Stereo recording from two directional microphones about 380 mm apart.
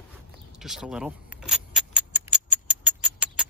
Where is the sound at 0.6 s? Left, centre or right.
Centre.